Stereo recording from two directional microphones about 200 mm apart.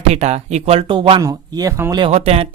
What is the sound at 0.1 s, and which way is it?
Speech, 35° right (ahead or behind).